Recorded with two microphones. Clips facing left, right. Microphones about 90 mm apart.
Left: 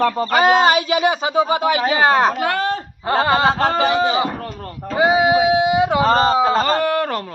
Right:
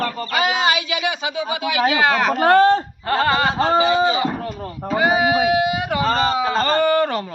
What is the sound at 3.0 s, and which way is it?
Speech, 20° left (ahead or behind).